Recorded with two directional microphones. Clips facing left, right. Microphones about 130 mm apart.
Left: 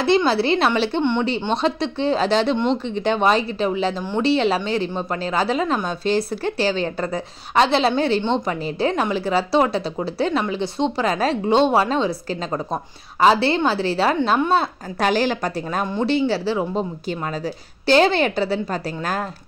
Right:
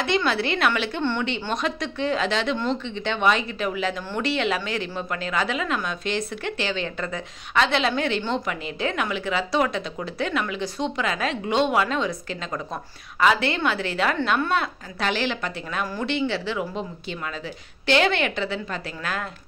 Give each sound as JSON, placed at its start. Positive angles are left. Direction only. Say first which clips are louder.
{"t": 0.0, "sound": "a woman's voice", "louder": "left 6 dB", "side_deg": 30}
{"t": 2.9, "sound": "a woman's voice", "louder": "left 3 dB", "side_deg": 40}
{"t": 15.8, "sound": "a woman's voice", "louder": "left 5 dB", "side_deg": 25}
{"t": 16.1, "sound": "a woman's voice", "louder": "left 6 dB", "side_deg": 35}